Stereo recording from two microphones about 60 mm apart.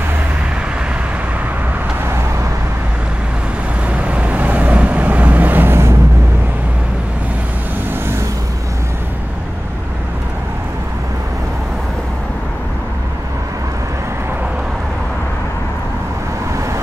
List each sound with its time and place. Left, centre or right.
3.9 s vehicle: right